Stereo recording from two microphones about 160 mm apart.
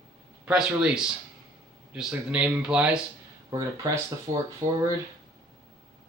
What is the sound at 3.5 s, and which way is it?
Speech, 20° right (ahead or behind).